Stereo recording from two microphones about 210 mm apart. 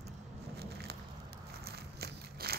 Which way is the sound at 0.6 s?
50° right (ahead or behind).